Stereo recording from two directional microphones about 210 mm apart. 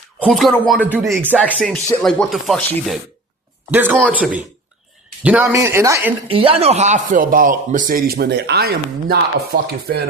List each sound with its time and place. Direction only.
0.2 s speech: centre (ahead or behind)
6.2 s speech: 25° right (ahead or behind); by 9.7 s 50° right (ahead or behind)